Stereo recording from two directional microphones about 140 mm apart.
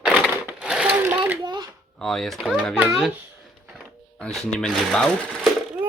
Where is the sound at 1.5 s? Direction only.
30° right (ahead or behind).